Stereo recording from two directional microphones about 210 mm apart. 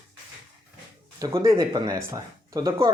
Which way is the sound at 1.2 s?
15° right (ahead or behind).